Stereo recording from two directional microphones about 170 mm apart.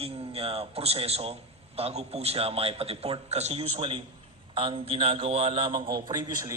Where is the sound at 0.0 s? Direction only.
35° right (ahead or behind).